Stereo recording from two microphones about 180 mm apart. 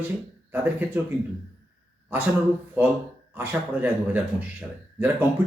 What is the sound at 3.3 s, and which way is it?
Speech, 10° right (ahead or behind).